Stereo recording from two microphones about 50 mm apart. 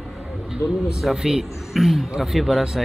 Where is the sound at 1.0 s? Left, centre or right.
Centre.